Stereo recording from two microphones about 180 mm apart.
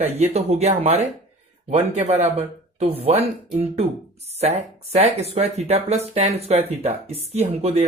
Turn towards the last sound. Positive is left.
turn(degrees=-35)  # may be behind; listen again after turning